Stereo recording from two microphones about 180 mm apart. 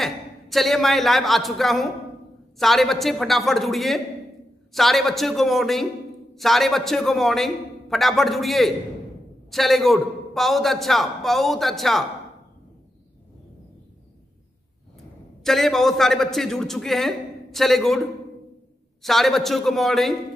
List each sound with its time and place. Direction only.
0.0 s a man's voice: centre (ahead or behind)
15.4 s a man's voice: centre (ahead or behind)
19.0 s a man's voice: centre (ahead or behind)